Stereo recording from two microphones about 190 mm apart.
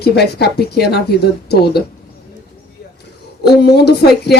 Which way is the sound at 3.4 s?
60° left (ahead or behind).